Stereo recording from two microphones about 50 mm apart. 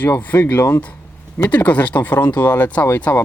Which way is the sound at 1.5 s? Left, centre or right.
Left.